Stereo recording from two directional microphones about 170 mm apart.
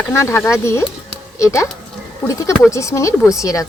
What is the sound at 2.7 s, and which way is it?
Speech, 20° left (ahead or behind).